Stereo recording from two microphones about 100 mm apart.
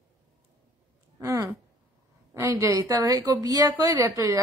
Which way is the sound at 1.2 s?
30° right (ahead or behind).